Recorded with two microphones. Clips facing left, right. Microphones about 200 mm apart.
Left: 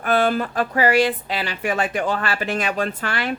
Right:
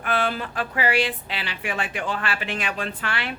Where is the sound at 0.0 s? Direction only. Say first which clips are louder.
Left 6 dB; 40° left (ahead or behind).